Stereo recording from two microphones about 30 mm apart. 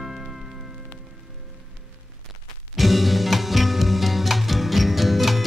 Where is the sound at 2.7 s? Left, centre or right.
Centre.